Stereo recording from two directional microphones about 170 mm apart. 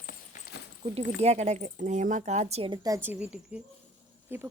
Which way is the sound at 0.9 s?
40° right (ahead or behind).